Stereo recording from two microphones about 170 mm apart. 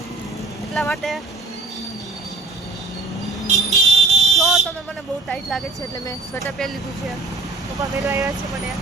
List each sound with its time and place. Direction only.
0.7 s speech: centre (ahead or behind)
3.4 s vehicle: 40° right (ahead or behind)
4.4 s fire alarm: centre (ahead or behind)
5.3 s speech: centre (ahead or behind)
7.8 s speech: 20° right (ahead or behind)